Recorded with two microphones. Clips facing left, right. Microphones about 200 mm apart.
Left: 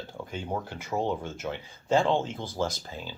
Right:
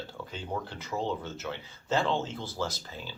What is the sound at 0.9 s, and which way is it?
Speech, 30° left (ahead or behind).